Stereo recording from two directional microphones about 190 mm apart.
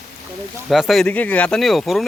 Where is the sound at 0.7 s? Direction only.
Centre (ahead or behind).